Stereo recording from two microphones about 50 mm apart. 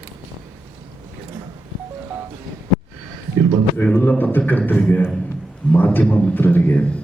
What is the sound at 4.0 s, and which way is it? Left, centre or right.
A man's voice, left.